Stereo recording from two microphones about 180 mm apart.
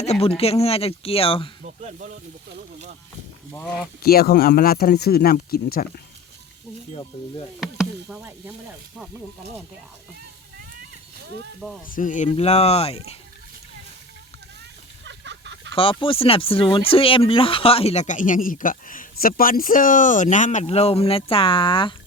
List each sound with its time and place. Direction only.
0.0 s speech: 35° left (ahead or behind)
1.8 s speech: 45° right (ahead or behind)
4.0 s speech: 55° left (ahead or behind)
6.9 s speech: 30° left (ahead or behind)
7.6 s speech: 5° right (ahead or behind)
11.9 s speech: 45° left (ahead or behind)
15.0 s a sound: 75° right (ahead or behind)
15.7 s speech: 30° left (ahead or behind)